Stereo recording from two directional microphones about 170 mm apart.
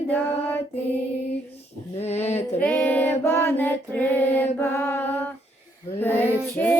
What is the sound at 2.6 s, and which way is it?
Female singing, 10° left (ahead or behind).